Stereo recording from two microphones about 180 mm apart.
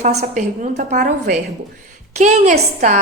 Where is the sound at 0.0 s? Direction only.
40° right (ahead or behind).